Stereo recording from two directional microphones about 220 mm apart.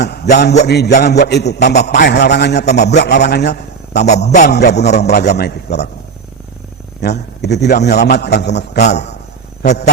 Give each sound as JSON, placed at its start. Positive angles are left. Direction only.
{"t": 0.0, "sound": "a sound", "side_deg": 50}
{"t": 0.6, "sound": "a man's voice", "side_deg": 50}
{"t": 4.9, "sound": "a man's voice", "side_deg": 30}
{"t": 5.3, "sound": "a man's voice", "side_deg": 50}
{"t": 7.0, "sound": "a man's voice", "side_deg": 50}